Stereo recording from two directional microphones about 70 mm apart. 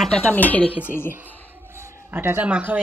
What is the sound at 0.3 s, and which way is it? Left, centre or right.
Speech, left.